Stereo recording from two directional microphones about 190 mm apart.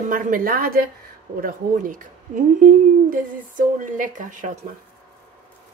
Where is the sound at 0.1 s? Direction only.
50° right (ahead or behind).